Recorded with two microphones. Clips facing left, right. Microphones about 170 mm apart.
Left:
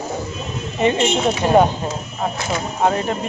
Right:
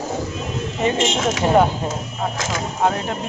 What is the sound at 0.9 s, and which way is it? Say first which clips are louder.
Speech: left 2 dB; 90° right.